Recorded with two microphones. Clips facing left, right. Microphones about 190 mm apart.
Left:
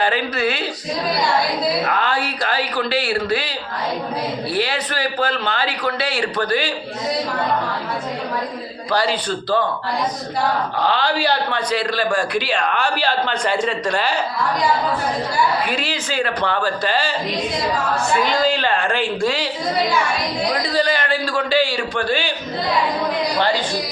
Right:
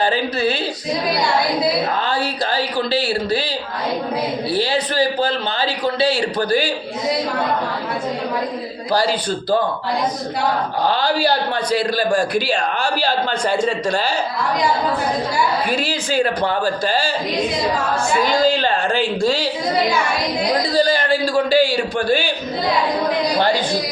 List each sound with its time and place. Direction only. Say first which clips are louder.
0.0 s a man's voice: right 1 dB; 35° right (ahead or behind)
1.9 s a man's voice: even; 35° right (ahead or behind)
4.5 s a man's voice: right 5 dB; 30° right (ahead or behind)
8.9 s a man's voice: right 2 dB; 35° right (ahead or behind)
15.9 s a man's voice: right 4 dB; 40° right (ahead or behind)
16.4 s a man's voice: right 2 dB; 10° right (ahead or behind)
20.7 s a man's voice: right 3 dB; 30° right (ahead or behind)
21.5 s a man's voice: right 3 dB; 10° right (ahead or behind)